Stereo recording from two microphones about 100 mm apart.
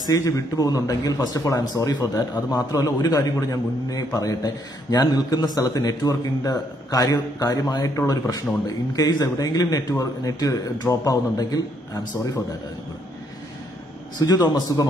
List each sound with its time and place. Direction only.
0.0 s a man's voice: 35° left (ahead or behind)
14.2 s a man's voice: 40° left (ahead or behind)